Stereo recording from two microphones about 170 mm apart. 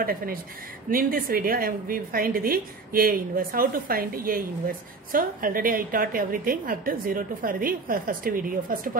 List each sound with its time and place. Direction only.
0.0 s a woman's voice: 60° right (ahead or behind)